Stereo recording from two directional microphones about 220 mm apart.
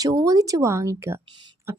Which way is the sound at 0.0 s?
15° right (ahead or behind).